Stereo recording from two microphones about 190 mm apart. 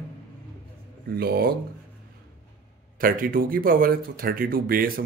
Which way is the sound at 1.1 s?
55° right (ahead or behind).